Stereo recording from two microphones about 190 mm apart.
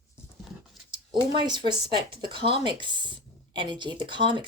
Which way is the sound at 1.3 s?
25° right (ahead or behind).